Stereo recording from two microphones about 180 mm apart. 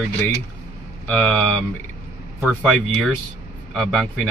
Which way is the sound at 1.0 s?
5° left (ahead or behind).